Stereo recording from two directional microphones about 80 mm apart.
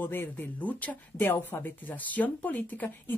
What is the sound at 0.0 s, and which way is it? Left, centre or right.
Speech, left.